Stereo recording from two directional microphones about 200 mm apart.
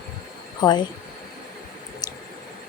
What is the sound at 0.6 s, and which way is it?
Speech, 20° left (ahead or behind).